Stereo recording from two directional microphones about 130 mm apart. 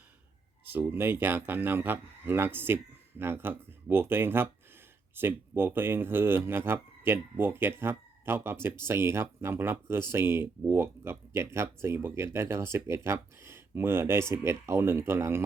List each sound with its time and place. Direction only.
0.6 s speech: 15° right (ahead or behind)